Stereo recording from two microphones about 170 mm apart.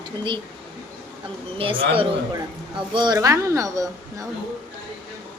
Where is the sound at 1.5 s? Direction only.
30° right (ahead or behind).